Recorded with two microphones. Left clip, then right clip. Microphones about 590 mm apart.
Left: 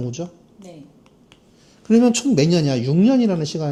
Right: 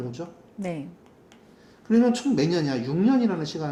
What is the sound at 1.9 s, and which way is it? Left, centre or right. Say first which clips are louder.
Speech: left 5 dB; left.